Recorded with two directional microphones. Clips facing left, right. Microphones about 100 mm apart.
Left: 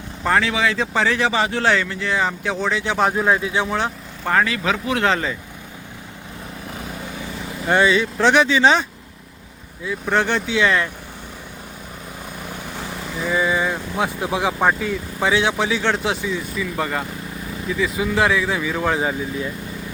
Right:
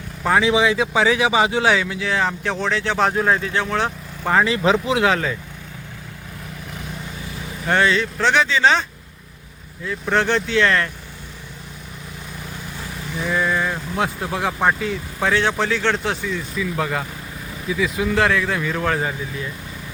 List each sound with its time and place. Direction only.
0.2 s speech: 5° right (ahead or behind)
0.4 s speech: 15° right (ahead or behind)
0.8 s speech: 5° right (ahead or behind); by 3.8 s 10° left (ahead or behind)
3.8 s vehicle: centre (ahead or behind)
4.4 s speech: 25° right (ahead or behind)
5.0 s speech: centre (ahead or behind)
7.7 s speech: 10° left (ahead or behind)
9.8 s speech: 5° left (ahead or behind)
13.2 s speech: 5° left (ahead or behind)
16.6 s speech: centre (ahead or behind)